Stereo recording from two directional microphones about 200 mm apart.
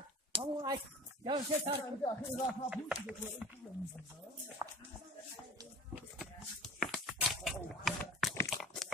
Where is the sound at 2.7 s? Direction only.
5° right (ahead or behind).